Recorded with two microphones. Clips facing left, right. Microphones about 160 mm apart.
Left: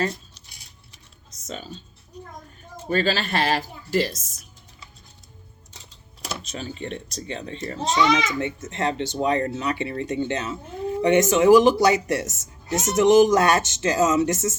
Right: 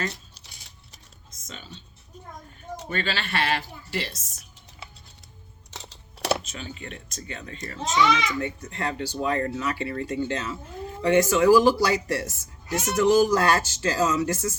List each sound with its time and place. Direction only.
1.5 s speech: 40° left (ahead or behind)
2.9 s speech: 40° left (ahead or behind)
5.7 s music: 80° right
6.4 s a child's voice: 40° left (ahead or behind); by 14.5 s 20° left (ahead or behind)